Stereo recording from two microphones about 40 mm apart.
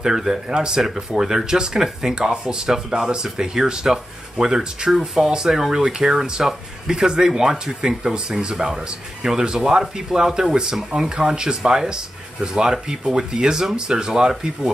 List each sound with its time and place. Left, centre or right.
0.0 s speech: centre